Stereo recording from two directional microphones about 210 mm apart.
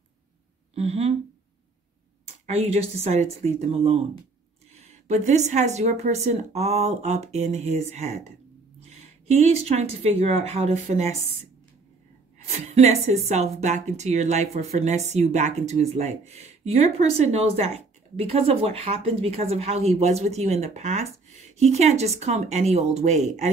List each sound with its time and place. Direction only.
0.7 s a woman's voice: 30° right (ahead or behind)
2.4 s a woman's voice: 30° right (ahead or behind)
12.4 s a woman's voice: 30° right (ahead or behind)